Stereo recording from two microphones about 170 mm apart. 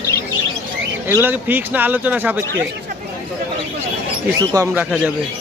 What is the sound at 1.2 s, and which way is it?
Speech, 10° right (ahead or behind).